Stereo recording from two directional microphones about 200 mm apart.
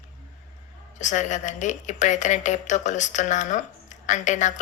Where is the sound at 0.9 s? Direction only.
35° left (ahead or behind).